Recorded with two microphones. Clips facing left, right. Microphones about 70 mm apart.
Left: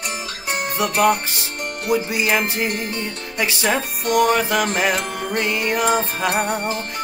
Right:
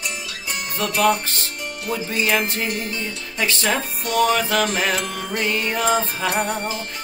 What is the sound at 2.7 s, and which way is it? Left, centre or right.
Music, left.